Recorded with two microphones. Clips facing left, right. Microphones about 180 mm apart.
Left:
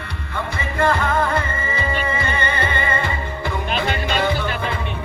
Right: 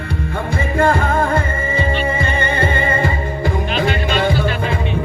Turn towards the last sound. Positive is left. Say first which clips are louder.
# right 4 dB
turn(degrees=-45)  # may be behind; listen again after turning